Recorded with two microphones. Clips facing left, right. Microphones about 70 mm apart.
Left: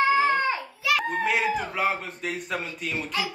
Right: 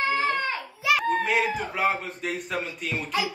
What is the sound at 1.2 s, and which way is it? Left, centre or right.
A man's voice, centre.